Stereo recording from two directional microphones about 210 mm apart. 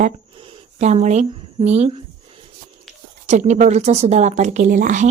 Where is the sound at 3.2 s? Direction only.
35° right (ahead or behind).